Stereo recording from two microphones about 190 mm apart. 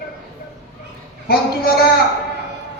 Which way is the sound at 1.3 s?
50° left (ahead or behind).